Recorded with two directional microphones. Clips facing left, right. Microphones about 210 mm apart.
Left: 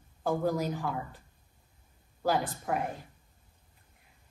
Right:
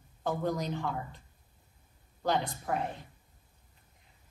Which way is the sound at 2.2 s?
5° left (ahead or behind).